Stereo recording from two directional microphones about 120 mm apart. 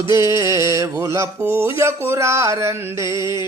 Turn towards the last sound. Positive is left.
turn(degrees=-25)  # may be behind; listen again after turning